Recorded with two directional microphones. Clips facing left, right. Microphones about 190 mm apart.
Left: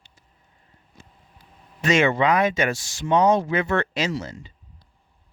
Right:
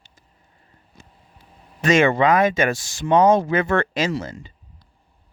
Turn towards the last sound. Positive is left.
turn(degrees=-50)  # may be behind; listen again after turning